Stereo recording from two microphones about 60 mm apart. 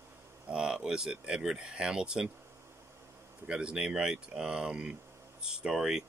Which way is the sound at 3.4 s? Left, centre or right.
Centre.